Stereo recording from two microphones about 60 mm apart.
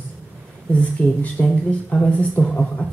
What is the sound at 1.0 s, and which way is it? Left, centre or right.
Speech, left.